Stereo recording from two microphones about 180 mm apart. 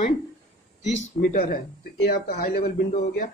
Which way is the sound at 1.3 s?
60° left (ahead or behind).